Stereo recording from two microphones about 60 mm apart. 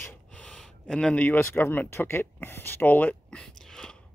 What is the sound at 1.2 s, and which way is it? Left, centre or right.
Speech, left.